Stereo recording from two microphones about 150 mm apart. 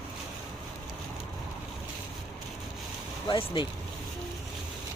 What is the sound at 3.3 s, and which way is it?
Speech, 35° left (ahead or behind).